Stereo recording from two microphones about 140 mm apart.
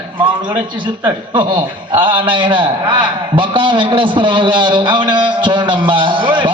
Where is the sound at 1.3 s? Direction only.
35° right (ahead or behind).